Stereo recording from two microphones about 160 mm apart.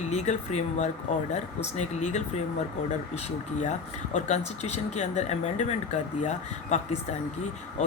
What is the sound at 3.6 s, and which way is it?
Speech, 50° left (ahead or behind).